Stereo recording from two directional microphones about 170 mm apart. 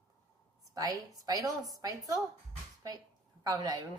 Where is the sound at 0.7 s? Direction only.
20° right (ahead or behind).